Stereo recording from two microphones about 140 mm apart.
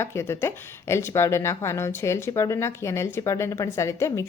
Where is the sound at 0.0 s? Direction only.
20° left (ahead or behind).